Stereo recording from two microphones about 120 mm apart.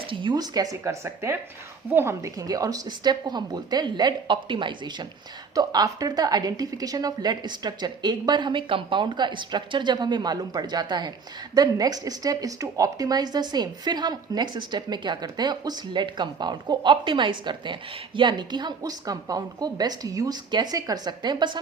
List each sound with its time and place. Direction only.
0.1 s a woman's voice: 40° right (ahead or behind)
5.5 s a woman's voice: 30° right (ahead or behind)